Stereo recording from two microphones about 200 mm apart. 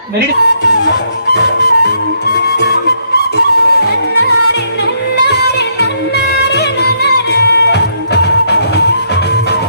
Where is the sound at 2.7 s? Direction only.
55° left (ahead or behind).